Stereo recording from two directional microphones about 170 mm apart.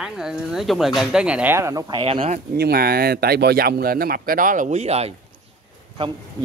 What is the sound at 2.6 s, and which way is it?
Speech, 65° right (ahead or behind).